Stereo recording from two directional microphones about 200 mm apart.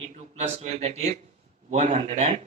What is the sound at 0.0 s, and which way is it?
A man's voice, 35° right (ahead or behind).